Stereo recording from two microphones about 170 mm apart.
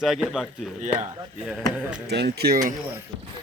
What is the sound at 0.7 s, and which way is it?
Speech, 45° right (ahead or behind).